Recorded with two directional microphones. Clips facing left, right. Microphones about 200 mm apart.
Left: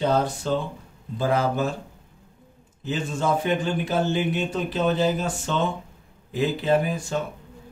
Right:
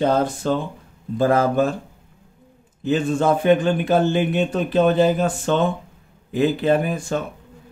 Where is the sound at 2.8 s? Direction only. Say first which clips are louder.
Right 7 dB; 60° right (ahead or behind).